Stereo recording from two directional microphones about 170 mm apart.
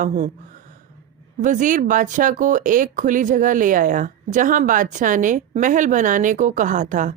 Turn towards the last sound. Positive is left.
turn(degrees=-50)  # may be behind; listen again after turning